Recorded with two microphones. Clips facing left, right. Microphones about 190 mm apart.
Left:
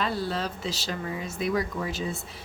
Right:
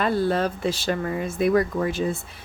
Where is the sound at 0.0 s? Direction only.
55° right (ahead or behind).